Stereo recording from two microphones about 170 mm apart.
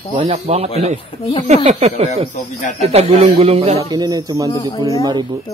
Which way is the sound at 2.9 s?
35° right (ahead or behind).